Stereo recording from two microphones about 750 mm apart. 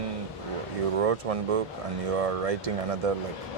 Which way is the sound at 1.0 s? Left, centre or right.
Right.